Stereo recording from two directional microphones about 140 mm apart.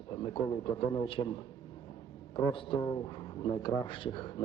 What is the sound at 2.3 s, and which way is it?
Speech, 35° left (ahead or behind).